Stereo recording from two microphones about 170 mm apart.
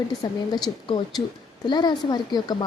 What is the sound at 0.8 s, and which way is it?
Speech, 25° left (ahead or behind).